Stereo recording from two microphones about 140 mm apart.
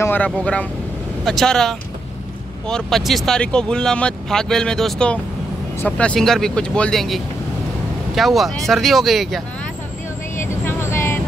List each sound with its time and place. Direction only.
0.0 s speech: 10° left (ahead or behind)
10.4 s vehicle: 15° left (ahead or behind)